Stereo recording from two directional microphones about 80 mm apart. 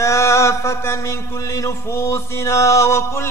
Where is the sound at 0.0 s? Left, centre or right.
Left.